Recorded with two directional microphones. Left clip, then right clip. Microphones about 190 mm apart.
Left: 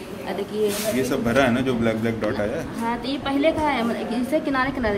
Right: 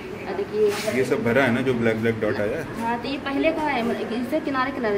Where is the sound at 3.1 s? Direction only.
25° left (ahead or behind).